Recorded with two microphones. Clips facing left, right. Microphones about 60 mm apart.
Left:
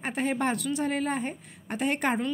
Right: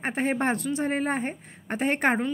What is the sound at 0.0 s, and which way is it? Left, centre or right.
A woman's voice, right.